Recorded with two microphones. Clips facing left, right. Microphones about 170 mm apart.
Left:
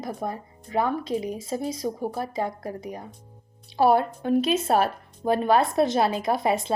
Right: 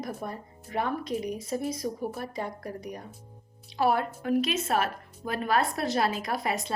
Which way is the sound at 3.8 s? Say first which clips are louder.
Left 6 dB; 30° left (ahead or behind).